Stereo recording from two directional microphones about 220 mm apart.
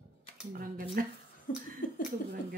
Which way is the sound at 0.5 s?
40° right (ahead or behind).